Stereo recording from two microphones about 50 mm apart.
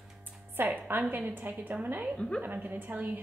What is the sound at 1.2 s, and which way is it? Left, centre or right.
Speech, right.